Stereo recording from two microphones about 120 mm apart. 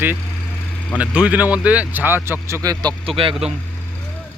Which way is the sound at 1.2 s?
10° right (ahead or behind).